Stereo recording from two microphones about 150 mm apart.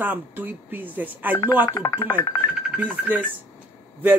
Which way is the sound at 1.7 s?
25° left (ahead or behind).